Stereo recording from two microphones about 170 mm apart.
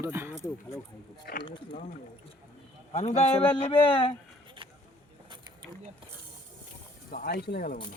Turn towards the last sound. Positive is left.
turn(degrees=70)  # may be behind; listen again after turning